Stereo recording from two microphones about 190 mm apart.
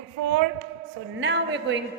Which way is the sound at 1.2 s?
70° right (ahead or behind).